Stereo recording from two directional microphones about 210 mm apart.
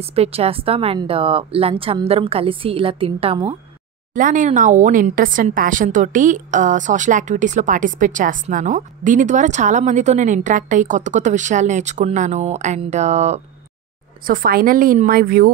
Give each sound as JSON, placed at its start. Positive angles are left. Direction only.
{"t": 0.0, "sound": "a woman's voice", "side_deg": -30}
{"t": 4.1, "sound": "speech", "side_deg": -40}
{"t": 14.2, "sound": "a woman's voice", "side_deg": -45}